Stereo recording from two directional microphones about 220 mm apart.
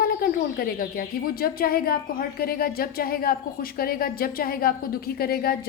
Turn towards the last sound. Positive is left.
turn(degrees=45)  # may be behind; listen again after turning